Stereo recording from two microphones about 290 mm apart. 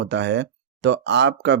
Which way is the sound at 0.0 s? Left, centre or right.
Right.